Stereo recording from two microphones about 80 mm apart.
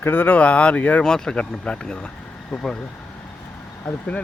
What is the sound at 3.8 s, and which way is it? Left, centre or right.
Speech, centre.